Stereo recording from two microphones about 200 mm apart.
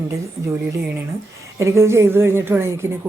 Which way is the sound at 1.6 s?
15° right (ahead or behind).